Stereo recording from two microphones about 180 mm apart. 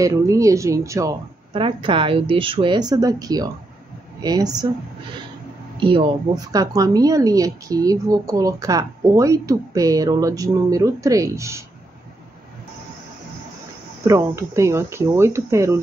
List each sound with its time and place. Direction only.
0.0 s speech: 20° right (ahead or behind)
1.5 s a woman's voice: 30° right (ahead or behind)
5.8 s a woman's voice: 30° right (ahead or behind)
14.0 s speech: 15° right (ahead or behind)